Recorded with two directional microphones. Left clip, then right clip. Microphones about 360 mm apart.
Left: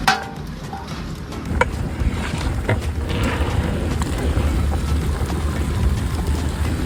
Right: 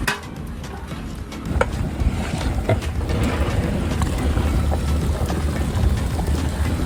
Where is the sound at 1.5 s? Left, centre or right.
Centre.